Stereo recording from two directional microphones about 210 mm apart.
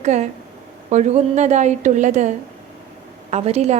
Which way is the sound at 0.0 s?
35° right (ahead or behind).